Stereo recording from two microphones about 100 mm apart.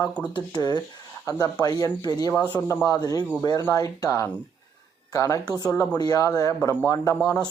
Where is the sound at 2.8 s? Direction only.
40° left (ahead or behind).